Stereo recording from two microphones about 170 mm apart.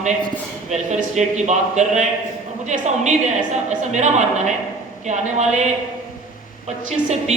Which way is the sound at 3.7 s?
45° right (ahead or behind).